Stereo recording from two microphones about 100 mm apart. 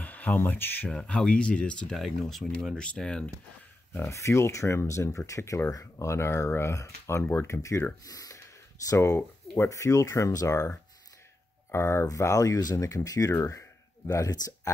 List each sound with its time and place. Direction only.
0.0 s speech: 15° left (ahead or behind)
0.8 s speech: 10° left (ahead or behind)
3.9 s speech: 30° left (ahead or behind)